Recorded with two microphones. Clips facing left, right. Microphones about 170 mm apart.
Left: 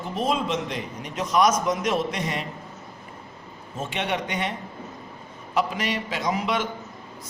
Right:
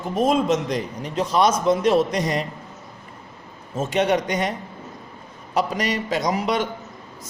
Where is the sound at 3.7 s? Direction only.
40° right (ahead or behind).